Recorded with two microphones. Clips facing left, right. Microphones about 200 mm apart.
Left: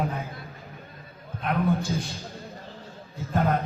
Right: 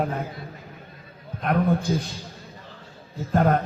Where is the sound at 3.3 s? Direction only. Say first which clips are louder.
Right 4 dB; 45° right (ahead or behind).